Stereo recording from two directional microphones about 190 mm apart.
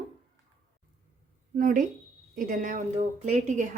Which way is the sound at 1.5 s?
45° right (ahead or behind).